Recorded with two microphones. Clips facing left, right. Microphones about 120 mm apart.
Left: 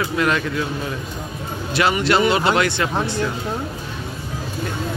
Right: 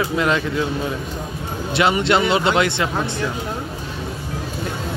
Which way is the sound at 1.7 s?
25° right (ahead or behind).